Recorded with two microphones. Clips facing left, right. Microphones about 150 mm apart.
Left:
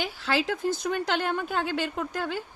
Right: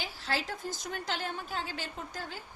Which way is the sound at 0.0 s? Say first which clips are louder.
Left 8 dB; 70° left (ahead or behind).